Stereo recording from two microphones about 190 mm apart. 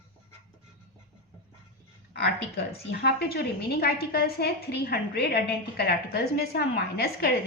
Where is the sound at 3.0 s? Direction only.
55° left (ahead or behind).